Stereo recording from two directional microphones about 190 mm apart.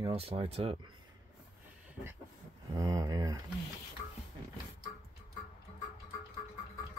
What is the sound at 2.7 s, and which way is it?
Speech, 20° right (ahead or behind).